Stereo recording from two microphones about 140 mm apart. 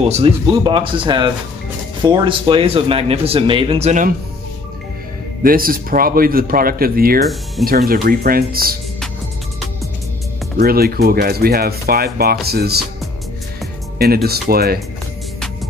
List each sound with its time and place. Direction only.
0.0 s speech: 45° right (ahead or behind)
5.4 s speech: 90° right
10.6 s speech: 90° right
13.9 s speech: 90° right